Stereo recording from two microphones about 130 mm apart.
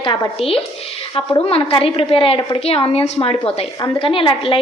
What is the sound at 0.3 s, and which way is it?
A woman's voice, 45° left (ahead or behind).